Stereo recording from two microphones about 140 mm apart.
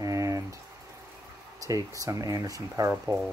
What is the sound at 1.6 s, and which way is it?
Speech, 25° right (ahead or behind).